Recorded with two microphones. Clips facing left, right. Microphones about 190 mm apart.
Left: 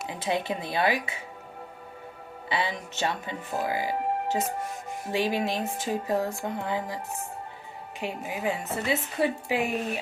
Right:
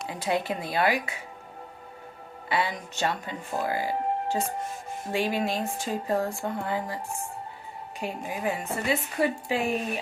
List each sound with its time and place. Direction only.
0.1 s speech: 20° left (ahead or behind)
2.5 s a woman's voice: 20° left (ahead or behind)
8.2 s a woman's voice: 5° left (ahead or behind)
8.4 s a woman's voice: 20° left (ahead or behind)